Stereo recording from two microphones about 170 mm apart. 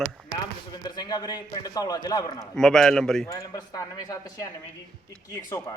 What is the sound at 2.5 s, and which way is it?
Speech, 5° left (ahead or behind).